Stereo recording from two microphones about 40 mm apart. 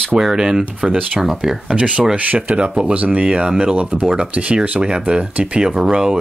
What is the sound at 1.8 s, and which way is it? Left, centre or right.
Speech, right.